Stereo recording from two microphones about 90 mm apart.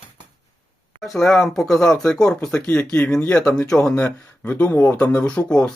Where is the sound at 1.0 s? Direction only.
5° left (ahead or behind).